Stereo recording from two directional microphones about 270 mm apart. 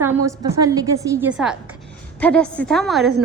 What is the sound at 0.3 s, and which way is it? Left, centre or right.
A woman's voice, centre.